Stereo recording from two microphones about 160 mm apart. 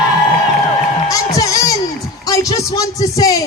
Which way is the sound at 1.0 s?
20° left (ahead or behind).